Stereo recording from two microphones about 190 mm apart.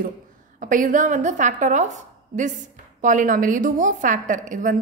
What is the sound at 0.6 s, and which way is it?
A woman's voice, 45° right (ahead or behind).